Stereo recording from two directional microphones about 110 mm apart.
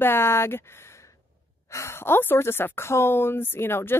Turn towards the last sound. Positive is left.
turn(degrees=20)  # may be behind; listen again after turning